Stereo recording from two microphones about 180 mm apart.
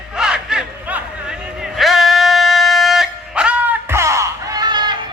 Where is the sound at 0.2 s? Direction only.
5° right (ahead or behind).